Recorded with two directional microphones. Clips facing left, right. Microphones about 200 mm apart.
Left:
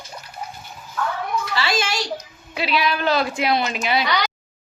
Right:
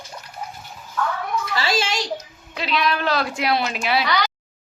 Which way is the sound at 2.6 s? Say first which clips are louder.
Left 1 dB; 5° left (ahead or behind).